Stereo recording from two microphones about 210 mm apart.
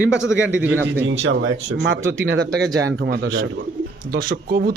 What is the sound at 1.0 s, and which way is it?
A man's voice, 65° right (ahead or behind).